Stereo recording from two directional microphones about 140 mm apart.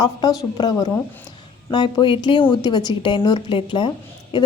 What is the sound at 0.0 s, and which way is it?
A woman's voice, 30° left (ahead or behind).